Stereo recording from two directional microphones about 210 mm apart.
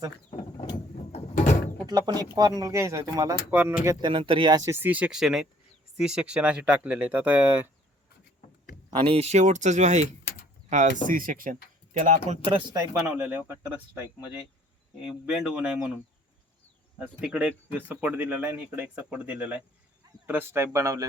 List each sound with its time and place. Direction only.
1.9 s speech: 20° right (ahead or behind)
4.1 s speech: 25° right (ahead or behind); by 7.7 s 10° right (ahead or behind)
9.0 s speech: 25° right (ahead or behind)
12.5 s speech: 20° right (ahead or behind)
15.4 s speech: 5° right (ahead or behind)
17.0 s speech: 5° right (ahead or behind)